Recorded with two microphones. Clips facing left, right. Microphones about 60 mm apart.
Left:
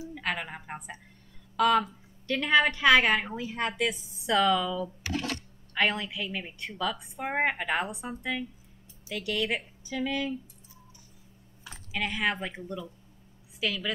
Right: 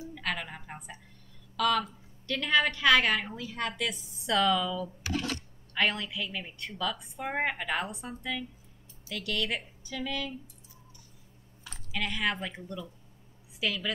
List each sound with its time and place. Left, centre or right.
0.1 s a woman's voice: centre
4.3 s a woman's voice: centre
11.6 s speech: centre